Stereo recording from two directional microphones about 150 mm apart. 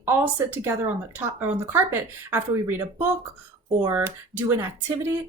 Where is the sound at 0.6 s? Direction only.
15° right (ahead or behind).